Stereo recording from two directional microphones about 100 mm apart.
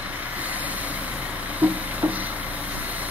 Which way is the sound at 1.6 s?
15° right (ahead or behind).